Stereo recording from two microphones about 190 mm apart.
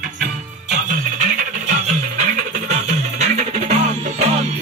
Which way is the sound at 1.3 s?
40° right (ahead or behind).